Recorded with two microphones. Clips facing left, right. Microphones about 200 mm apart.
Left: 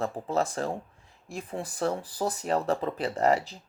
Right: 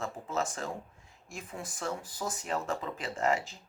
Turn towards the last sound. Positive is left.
turn(degrees=35)  # may be behind; listen again after turning